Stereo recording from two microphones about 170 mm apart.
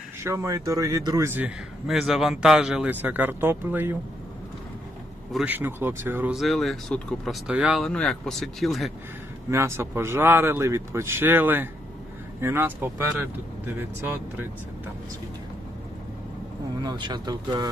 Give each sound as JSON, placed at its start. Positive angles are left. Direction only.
{"t": 0.2, "sound": "speech", "side_deg": -15}
{"t": 5.3, "sound": "speech", "side_deg": -5}
{"t": 9.5, "sound": "speech", "side_deg": -15}
{"t": 16.8, "sound": "speech", "side_deg": -25}